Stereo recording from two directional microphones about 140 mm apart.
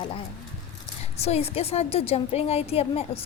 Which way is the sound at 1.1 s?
50° left (ahead or behind).